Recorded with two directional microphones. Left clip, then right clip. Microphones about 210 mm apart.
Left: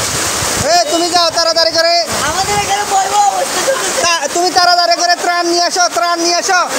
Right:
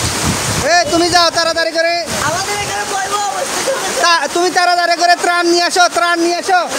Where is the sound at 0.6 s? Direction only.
25° right (ahead or behind).